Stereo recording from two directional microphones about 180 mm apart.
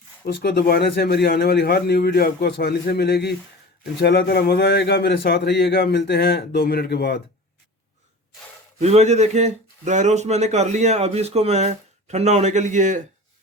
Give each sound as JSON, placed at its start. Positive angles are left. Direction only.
{"t": 0.4, "sound": "speech", "side_deg": 60}
{"t": 8.8, "sound": "speech", "side_deg": -40}